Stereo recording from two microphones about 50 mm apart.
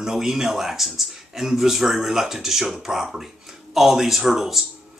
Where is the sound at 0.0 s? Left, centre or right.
Centre.